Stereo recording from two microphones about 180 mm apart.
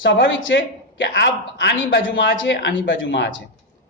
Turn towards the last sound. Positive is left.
turn(degrees=85)